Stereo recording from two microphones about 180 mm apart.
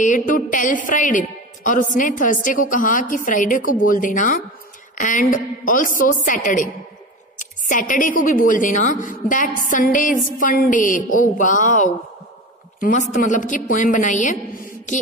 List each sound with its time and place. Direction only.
0.0 s a woman's voice: 45° left (ahead or behind)